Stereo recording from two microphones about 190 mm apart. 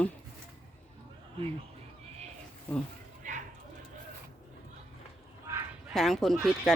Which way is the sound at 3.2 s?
40° right (ahead or behind).